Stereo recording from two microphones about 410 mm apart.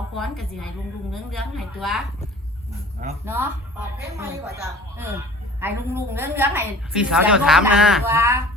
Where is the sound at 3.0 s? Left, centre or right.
Centre.